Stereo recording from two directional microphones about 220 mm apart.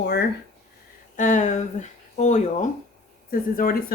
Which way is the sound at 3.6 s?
40° left (ahead or behind).